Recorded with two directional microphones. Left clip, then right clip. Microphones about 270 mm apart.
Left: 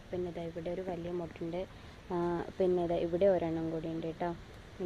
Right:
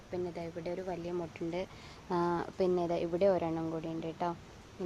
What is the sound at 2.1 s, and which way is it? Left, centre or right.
Speech, centre.